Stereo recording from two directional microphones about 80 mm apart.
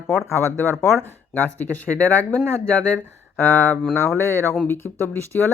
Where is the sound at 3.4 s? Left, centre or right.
Left.